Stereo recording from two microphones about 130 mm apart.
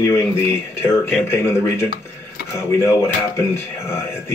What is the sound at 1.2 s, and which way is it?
Speech, 20° left (ahead or behind).